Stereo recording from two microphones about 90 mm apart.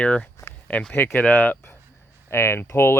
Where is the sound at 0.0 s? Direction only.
10° left (ahead or behind).